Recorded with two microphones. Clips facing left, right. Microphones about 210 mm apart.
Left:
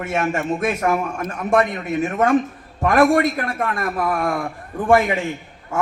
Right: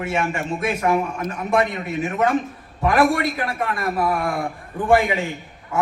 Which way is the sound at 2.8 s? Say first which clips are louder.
Left 3 dB; 50° left (ahead or behind).